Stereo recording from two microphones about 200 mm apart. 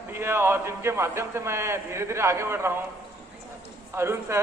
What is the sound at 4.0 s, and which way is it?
Speech, 15° right (ahead or behind).